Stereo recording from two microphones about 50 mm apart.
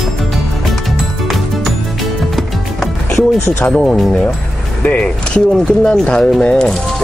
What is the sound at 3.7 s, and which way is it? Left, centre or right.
Speech, left.